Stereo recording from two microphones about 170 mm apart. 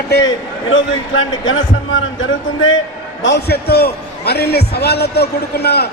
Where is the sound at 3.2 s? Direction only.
80° left.